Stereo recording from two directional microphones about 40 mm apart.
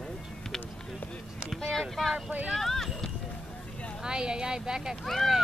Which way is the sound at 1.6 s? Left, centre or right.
Centre.